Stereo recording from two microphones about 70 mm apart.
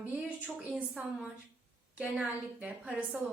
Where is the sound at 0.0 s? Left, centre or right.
Right.